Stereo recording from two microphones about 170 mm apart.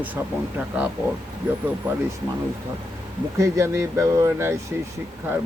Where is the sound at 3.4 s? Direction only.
15° right (ahead or behind).